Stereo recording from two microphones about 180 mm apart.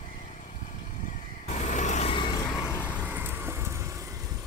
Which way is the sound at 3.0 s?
10° right (ahead or behind).